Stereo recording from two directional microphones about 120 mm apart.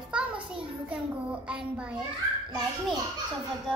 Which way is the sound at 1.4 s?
10° right (ahead or behind).